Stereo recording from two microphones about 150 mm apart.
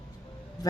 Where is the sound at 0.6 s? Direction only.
25° left (ahead or behind).